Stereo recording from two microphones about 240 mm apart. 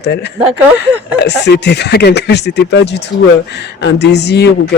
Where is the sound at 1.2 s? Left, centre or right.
Left.